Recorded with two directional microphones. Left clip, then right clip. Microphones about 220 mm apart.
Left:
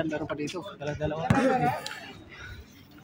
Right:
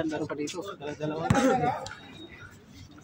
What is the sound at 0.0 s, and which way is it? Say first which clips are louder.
Speech: even; 40° left (ahead or behind).